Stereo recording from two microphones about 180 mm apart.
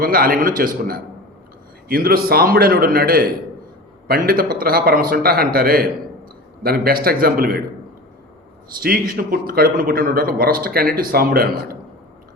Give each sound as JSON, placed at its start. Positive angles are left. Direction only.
{"t": 0.0, "sound": "a man's voice", "side_deg": -55}
{"t": 8.8, "sound": "a man's voice", "side_deg": -55}